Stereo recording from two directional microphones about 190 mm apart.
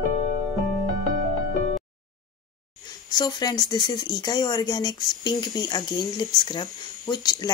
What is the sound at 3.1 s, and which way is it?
A woman's voice, 20° left (ahead or behind).